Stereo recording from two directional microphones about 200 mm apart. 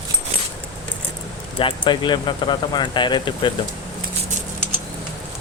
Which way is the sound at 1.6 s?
25° left (ahead or behind).